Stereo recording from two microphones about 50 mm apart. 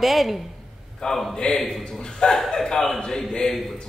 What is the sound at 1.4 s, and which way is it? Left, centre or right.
Speech, centre.